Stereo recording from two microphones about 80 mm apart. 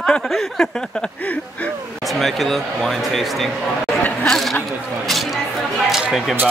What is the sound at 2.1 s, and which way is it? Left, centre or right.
Speech, centre.